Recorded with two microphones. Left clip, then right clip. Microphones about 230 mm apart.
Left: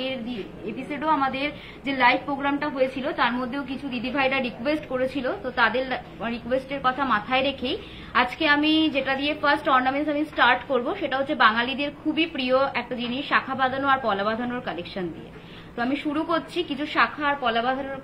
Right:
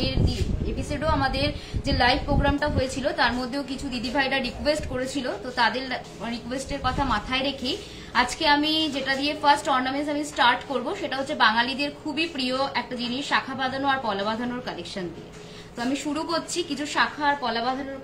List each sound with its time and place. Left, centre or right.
0.9 s a woman's voice: centre
15.9 s a woman's voice: right